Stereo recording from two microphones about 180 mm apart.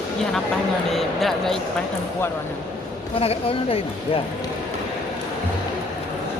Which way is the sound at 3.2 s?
35° left (ahead or behind).